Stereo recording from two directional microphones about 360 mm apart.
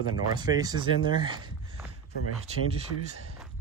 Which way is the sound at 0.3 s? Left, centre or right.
Centre.